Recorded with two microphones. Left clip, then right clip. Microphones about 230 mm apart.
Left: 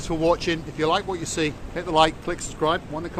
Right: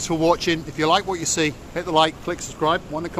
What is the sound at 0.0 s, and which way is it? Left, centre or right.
Speech, right.